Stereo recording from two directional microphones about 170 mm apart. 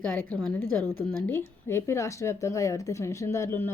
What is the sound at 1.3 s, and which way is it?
Speech, 15° left (ahead or behind).